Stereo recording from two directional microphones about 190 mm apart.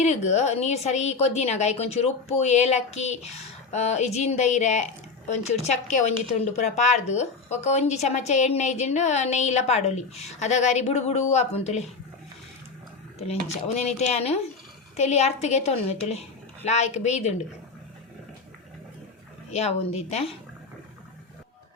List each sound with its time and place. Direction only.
0.0 s speech: 35° left (ahead or behind)
13.7 s speech: 35° left (ahead or behind)
19.5 s speech: 35° left (ahead or behind)